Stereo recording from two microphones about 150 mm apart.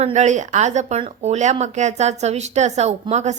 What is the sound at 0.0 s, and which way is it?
A woman's voice, 50° right (ahead or behind).